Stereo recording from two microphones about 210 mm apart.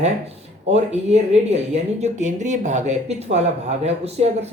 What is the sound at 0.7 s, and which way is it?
Speech, 30° right (ahead or behind).